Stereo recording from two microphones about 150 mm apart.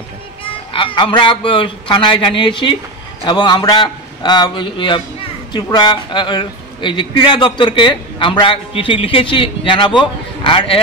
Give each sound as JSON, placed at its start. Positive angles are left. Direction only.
{"t": 0.7, "sound": "a man's voice", "side_deg": 35}